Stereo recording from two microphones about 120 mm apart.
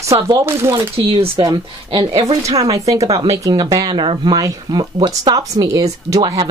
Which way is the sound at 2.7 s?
30° right (ahead or behind).